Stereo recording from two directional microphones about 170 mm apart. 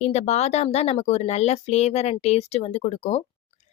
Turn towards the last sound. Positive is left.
turn(degrees=40)  # may be behind; listen again after turning